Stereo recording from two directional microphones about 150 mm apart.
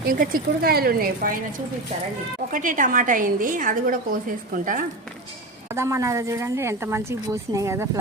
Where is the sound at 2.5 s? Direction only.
60° right (ahead or behind).